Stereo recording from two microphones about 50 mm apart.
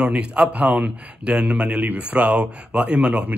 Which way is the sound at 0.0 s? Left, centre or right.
Centre.